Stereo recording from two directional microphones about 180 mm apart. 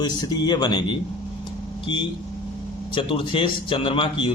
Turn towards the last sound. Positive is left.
turn(degrees=30)  # may be behind; listen again after turning